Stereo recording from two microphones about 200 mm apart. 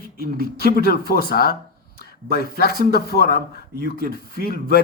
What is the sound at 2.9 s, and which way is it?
A man's voice, 50° left (ahead or behind).